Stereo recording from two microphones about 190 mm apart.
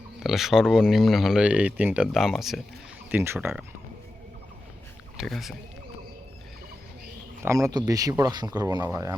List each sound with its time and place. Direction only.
0.2 s speech: centre (ahead or behind)
3.1 s speech: 10° right (ahead or behind)
5.1 s speech: centre (ahead or behind)
7.4 s a man's voice: 15° right (ahead or behind)